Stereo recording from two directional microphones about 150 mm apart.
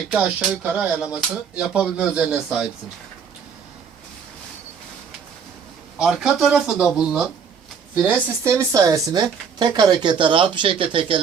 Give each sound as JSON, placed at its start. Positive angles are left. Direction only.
{"t": 0.6, "sound": "speech", "side_deg": -10}
{"t": 6.0, "sound": "speech", "side_deg": -5}
{"t": 8.0, "sound": "speech", "side_deg": -20}